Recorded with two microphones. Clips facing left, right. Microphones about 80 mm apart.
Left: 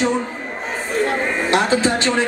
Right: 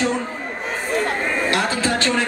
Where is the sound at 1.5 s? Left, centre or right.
Left.